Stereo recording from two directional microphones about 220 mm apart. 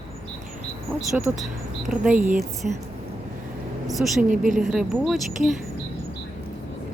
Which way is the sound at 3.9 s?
Centre (ahead or behind).